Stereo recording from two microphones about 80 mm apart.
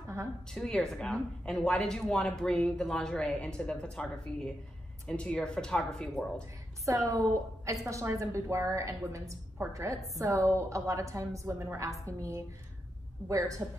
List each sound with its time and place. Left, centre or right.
0.5 s speech: centre
6.9 s a woman's voice: right